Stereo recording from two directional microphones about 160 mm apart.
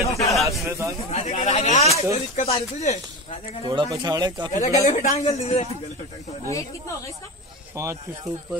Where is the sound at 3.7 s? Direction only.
30° right (ahead or behind).